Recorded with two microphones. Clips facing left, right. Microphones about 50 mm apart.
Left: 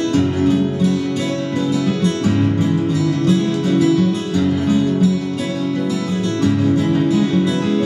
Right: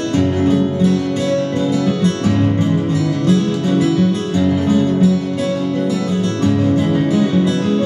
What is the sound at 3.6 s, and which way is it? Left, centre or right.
Music, right.